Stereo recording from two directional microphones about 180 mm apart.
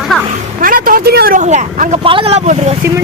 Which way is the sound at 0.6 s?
50° right (ahead or behind).